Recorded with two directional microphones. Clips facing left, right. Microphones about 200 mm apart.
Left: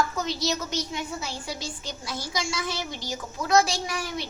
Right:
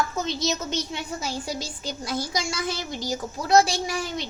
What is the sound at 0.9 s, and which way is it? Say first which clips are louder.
A child's voice: right 2 dB; 40° right (ahead or behind).